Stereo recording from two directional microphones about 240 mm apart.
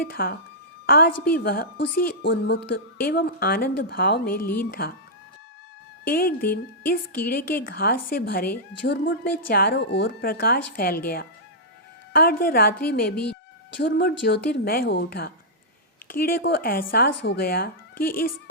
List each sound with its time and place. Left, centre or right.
0.0 s a woman's voice: left
2.2 s speech: left
6.1 s speech: left